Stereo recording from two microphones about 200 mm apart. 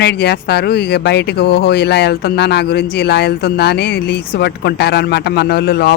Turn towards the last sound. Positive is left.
turn(degrees=55)  # may be behind; listen again after turning